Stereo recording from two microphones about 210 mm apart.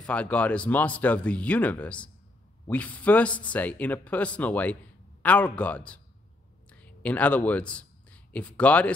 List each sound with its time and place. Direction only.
0.0 s speech: 5° left (ahead or behind)